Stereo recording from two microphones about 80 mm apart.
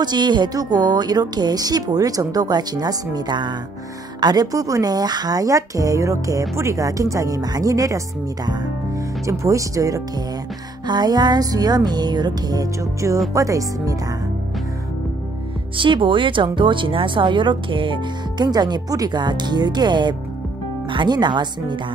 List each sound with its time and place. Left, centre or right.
0.0 s a woman's voice: right
9.2 s speech: right
10.9 s a woman's voice: right
13.3 s speech: right
15.8 s speech: right